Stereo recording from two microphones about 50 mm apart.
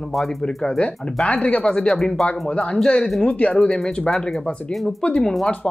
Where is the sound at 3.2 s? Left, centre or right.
Left.